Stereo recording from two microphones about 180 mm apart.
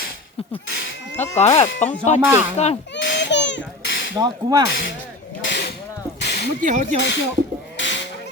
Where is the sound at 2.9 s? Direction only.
75° left (ahead or behind).